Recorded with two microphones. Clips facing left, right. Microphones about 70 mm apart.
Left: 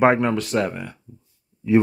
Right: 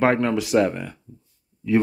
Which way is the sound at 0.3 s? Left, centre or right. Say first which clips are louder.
Right 3 dB; centre.